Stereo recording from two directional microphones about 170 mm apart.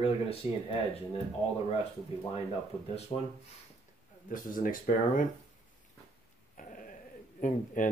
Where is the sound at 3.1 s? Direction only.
40° left (ahead or behind).